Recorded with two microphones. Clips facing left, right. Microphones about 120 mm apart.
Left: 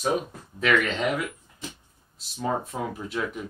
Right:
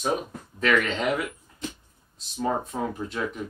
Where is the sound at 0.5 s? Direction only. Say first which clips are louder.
Even; centre (ahead or behind).